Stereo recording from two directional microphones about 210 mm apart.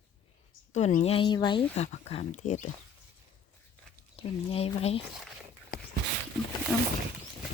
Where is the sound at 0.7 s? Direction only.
35° left (ahead or behind).